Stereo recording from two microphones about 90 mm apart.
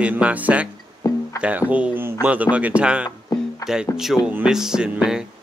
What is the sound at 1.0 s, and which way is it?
Music, 45° left (ahead or behind).